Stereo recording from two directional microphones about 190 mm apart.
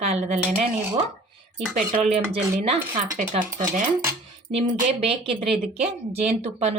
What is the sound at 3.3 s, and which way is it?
Speech, 45° right (ahead or behind).